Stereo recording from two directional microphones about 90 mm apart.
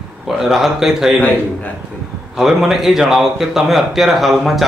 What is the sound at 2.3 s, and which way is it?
A man's voice, 5° right (ahead or behind).